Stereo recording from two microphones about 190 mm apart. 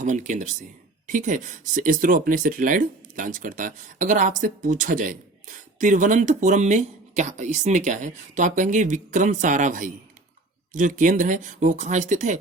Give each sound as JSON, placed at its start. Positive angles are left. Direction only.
{"t": 0.0, "sound": "speech", "side_deg": -40}